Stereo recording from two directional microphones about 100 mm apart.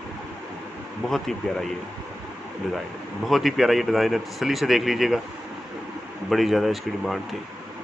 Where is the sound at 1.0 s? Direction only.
5° left (ahead or behind).